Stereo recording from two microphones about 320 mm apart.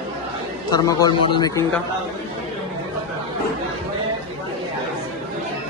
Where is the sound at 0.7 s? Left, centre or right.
Centre.